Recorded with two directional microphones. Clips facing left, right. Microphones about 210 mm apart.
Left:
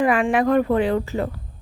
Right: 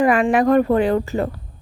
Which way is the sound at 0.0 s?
40° right (ahead or behind).